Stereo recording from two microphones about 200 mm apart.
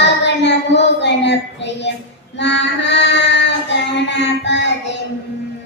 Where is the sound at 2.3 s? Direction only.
60° left (ahead or behind).